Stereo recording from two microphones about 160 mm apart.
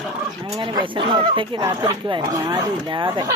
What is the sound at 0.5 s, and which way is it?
Speech, 30° right (ahead or behind).